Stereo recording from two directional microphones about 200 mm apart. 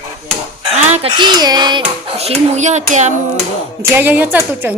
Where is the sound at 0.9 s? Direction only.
30° right (ahead or behind).